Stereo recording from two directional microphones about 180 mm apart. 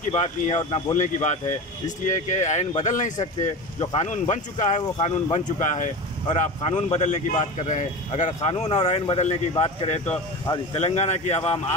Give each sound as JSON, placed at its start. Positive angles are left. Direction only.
{"t": 0.1, "sound": "speech", "side_deg": 35}
{"t": 3.8, "sound": "speech", "side_deg": 30}
{"t": 4.1, "sound": "speech", "side_deg": 40}
{"t": 10.0, "sound": "speech", "side_deg": 20}
{"t": 10.7, "sound": "speech", "side_deg": 35}